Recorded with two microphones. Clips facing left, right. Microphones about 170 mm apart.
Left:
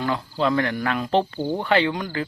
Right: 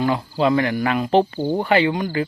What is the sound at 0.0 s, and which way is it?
Speech, 10° right (ahead or behind).